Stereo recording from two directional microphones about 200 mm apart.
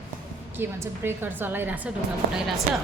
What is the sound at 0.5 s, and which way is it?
A woman's voice, 10° right (ahead or behind).